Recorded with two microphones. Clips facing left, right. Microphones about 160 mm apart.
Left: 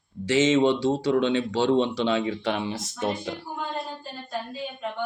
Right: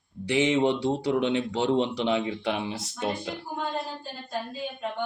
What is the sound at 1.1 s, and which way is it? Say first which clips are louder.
Speech: left 2 dB; 15° right (ahead or behind).